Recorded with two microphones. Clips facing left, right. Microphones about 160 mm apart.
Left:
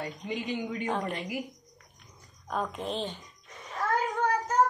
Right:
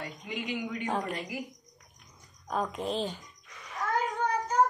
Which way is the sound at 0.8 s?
5° right (ahead or behind).